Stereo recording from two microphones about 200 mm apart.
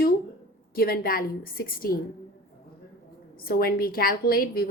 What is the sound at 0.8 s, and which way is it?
A woman's voice, 45° left (ahead or behind).